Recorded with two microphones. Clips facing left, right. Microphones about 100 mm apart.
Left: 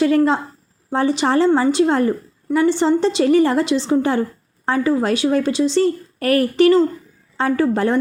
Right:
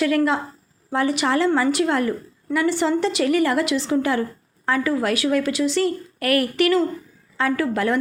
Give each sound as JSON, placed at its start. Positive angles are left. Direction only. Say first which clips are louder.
{"t": 0.0, "sound": "a woman's voice", "louder": "left 4 dB", "side_deg": 30}